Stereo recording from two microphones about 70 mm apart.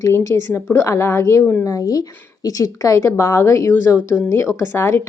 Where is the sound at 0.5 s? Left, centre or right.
Left.